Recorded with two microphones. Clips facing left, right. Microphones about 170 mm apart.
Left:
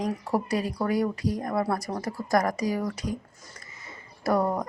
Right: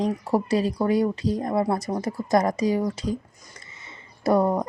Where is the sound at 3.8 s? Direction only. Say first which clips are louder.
Right 4 dB; 25° right (ahead or behind).